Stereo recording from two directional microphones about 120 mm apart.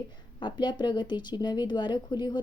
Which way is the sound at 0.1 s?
40° left (ahead or behind).